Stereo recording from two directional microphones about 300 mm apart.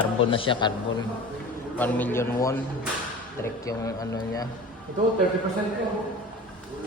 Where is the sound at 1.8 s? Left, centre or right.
Centre.